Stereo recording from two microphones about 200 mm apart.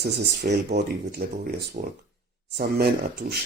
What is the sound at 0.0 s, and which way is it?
Speech, 55° right (ahead or behind).